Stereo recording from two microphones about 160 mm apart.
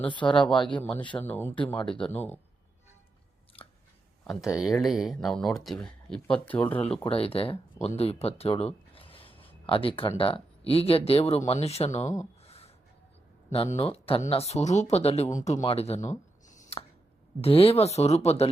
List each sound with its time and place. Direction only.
0.1 s speech: 30° left (ahead or behind)
0.8 s speech: 10° left (ahead or behind)
3.6 s biting: 35° left (ahead or behind)
4.2 s a sound: centre (ahead or behind)
4.8 s speech: centre (ahead or behind)
7.0 s speech: 35° left (ahead or behind)
12.5 s a sound: 40° left (ahead or behind)
13.5 s speech: 40° left (ahead or behind)
15.6 s a sound: 40° left (ahead or behind)
17.4 s speech: 35° left (ahead or behind)